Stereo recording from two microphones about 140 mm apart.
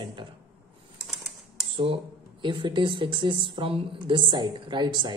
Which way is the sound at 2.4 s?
35° right (ahead or behind).